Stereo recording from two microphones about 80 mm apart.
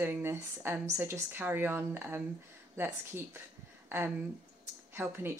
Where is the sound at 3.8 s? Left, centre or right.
Right.